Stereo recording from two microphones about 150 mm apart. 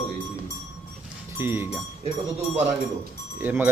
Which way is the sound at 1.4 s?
15° right (ahead or behind).